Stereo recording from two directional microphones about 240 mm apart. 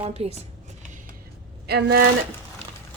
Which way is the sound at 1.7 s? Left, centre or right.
Right.